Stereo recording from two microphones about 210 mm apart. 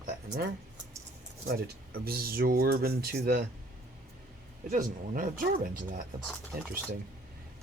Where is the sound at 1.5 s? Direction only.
45° right (ahead or behind).